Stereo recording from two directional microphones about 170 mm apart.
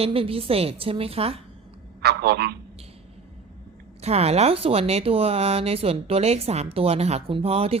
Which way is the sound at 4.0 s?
40° right (ahead or behind).